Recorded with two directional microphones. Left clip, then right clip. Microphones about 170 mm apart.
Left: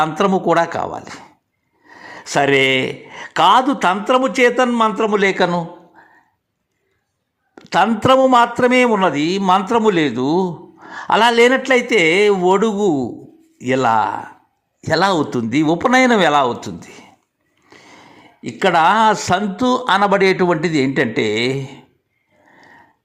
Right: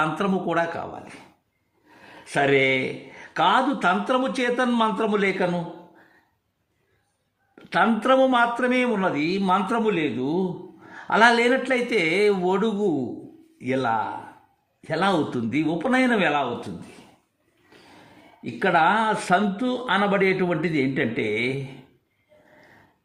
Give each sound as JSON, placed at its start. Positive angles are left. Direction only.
{"t": 0.2, "sound": "a man's voice", "side_deg": 30}
{"t": 2.2, "sound": "a man's voice", "side_deg": 25}
{"t": 4.7, "sound": "a man's voice", "side_deg": 10}
{"t": 7.5, "sound": "a man's voice", "side_deg": 25}
{"t": 9.8, "sound": "a man's voice", "side_deg": 30}
{"t": 18.4, "sound": "a man's voice", "side_deg": 25}